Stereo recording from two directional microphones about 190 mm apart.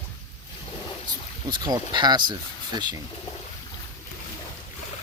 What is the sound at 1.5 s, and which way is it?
Speech, 20° right (ahead or behind).